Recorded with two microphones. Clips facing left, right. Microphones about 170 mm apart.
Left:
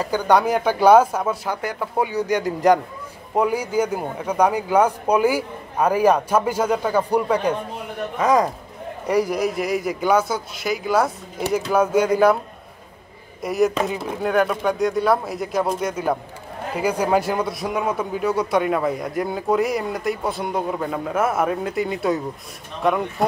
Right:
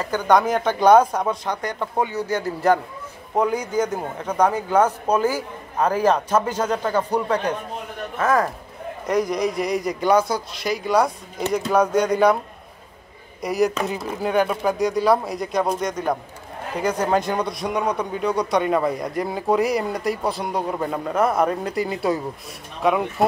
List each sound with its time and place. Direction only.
0.0 s a man's voice: 10° left (ahead or behind)
13.4 s a man's voice: centre (ahead or behind)